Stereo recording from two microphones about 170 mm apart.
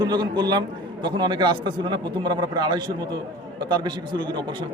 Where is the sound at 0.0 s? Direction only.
25° right (ahead or behind).